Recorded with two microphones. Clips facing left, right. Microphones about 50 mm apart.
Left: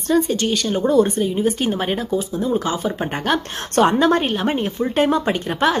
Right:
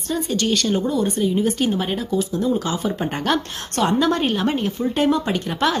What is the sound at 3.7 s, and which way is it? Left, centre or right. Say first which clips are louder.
Speech: left 4 dB; left.